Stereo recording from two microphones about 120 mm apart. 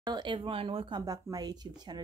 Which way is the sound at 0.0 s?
35° right (ahead or behind).